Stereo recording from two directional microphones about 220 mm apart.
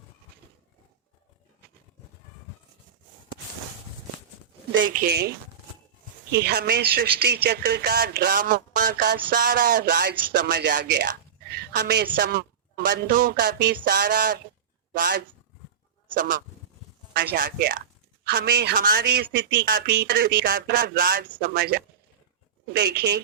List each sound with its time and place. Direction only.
4.9 s a man's voice: 40° right (ahead or behind)
6.3 s a man's voice: 45° right (ahead or behind)
17.2 s a man's voice: 40° right (ahead or behind)